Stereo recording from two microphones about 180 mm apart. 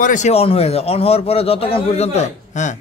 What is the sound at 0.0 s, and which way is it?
A man's voice, 45° left (ahead or behind).